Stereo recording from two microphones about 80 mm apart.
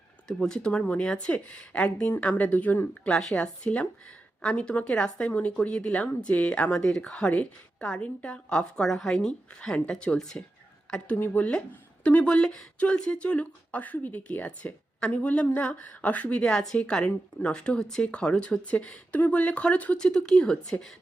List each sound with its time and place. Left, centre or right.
0.3 s speech: centre
3.0 s speech: centre